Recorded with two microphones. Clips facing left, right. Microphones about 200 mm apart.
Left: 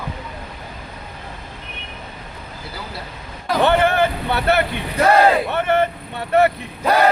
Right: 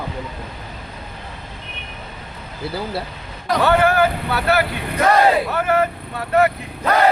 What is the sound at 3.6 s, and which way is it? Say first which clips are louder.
Speech: even; 25° left (ahead or behind).